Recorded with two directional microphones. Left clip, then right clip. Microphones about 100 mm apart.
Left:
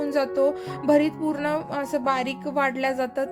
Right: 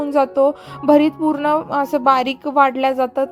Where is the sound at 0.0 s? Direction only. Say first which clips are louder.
Right 7 dB; 30° right (ahead or behind).